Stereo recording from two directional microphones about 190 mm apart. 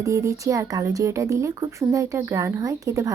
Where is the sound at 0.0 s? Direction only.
15° right (ahead or behind).